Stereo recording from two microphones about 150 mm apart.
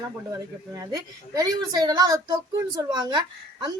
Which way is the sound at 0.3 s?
20° right (ahead or behind).